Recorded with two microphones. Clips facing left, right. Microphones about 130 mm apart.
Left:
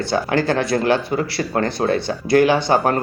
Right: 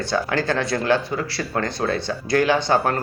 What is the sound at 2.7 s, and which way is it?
Speech, 15° left (ahead or behind).